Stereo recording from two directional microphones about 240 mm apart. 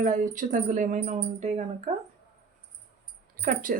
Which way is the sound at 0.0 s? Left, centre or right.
Right.